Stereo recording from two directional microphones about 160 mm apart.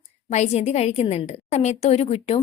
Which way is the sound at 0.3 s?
45° left (ahead or behind).